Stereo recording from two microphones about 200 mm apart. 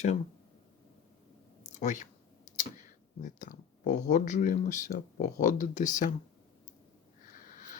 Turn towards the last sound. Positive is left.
turn(degrees=45)  # may be behind; listen again after turning